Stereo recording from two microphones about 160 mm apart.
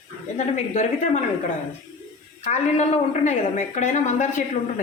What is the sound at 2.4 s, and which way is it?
A woman's voice, 45° left (ahead or behind).